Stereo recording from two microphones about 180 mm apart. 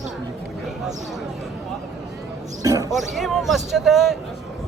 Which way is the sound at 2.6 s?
20° right (ahead or behind).